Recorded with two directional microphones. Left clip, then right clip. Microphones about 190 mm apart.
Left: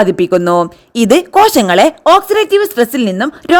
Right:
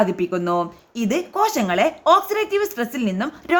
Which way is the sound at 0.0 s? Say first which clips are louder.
Left 10 dB; 45° left (ahead or behind).